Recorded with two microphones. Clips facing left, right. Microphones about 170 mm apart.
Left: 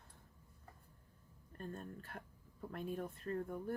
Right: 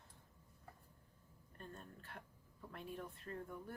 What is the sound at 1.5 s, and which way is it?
Speech, 45° left (ahead or behind).